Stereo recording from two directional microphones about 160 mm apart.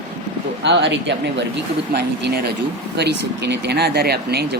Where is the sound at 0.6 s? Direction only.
90° right.